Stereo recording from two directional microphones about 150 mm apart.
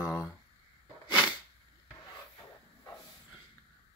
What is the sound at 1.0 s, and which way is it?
Sneeze, 30° left (ahead or behind).